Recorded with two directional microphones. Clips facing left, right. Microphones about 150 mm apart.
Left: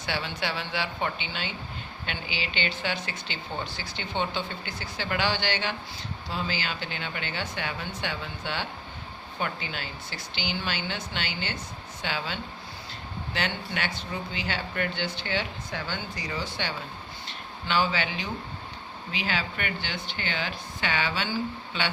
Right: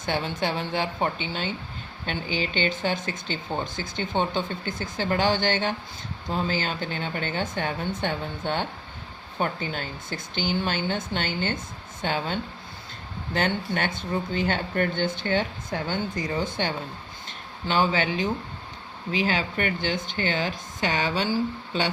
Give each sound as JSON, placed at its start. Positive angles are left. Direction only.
{"t": 0.0, "sound": "speech", "side_deg": -45}